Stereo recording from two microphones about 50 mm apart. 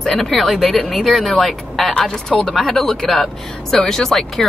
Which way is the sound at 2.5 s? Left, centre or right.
Centre.